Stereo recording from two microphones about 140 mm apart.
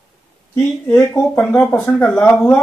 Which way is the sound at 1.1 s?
10° left (ahead or behind).